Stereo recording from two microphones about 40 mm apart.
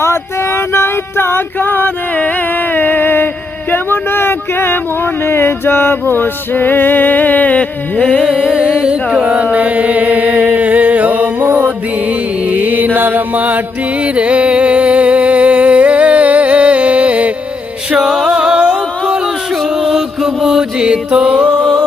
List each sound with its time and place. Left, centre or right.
0.1 s a sound: left
1.5 s male singing: left
2.7 s music: left
3.7 s a sound: left
5.2 s male singing: left
8.4 s carnatic music: right
9.2 s chant: right
12.0 s mantra: right
14.0 s music: right
17.9 s music: centre
19.8 s mantra: centre